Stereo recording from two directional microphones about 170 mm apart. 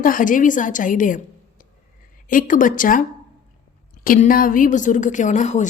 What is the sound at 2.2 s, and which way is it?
Speech, 50° left (ahead or behind).